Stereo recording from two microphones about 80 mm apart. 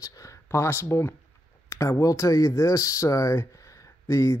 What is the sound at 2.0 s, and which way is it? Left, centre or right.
Speech, left.